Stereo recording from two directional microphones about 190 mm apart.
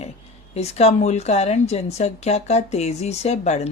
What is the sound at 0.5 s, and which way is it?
A woman's voice, 35° left (ahead or behind).